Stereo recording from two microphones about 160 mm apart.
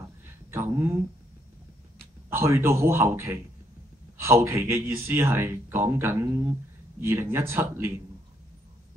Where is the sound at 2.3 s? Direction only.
15° right (ahead or behind).